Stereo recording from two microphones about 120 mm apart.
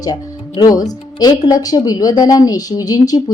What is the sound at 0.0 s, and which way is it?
A woman's voice, 35° left (ahead or behind).